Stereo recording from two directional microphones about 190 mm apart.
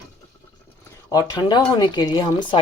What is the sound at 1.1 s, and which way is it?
Speech, 20° left (ahead or behind).